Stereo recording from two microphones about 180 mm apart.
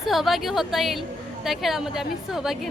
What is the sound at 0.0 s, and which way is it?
A woman's voice, centre (ahead or behind).